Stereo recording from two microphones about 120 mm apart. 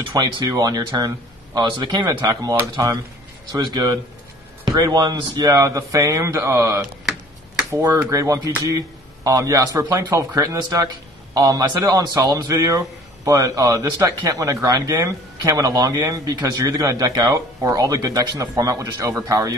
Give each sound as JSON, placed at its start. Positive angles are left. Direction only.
{"t": 0.1, "sound": "a man's voice", "side_deg": -35}